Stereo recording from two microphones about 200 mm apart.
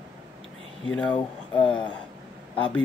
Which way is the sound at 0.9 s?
5° left (ahead or behind).